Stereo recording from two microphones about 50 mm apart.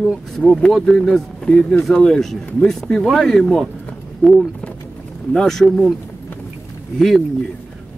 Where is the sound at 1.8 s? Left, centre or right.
Centre.